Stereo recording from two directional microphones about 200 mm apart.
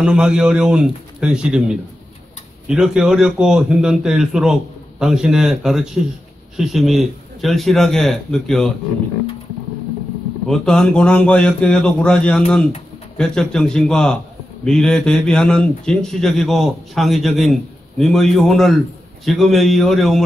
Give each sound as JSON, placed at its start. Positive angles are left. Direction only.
{"t": 0.0, "sound": "a man's voice", "side_deg": -5}
{"t": 10.5, "sound": "a man's voice", "side_deg": 5}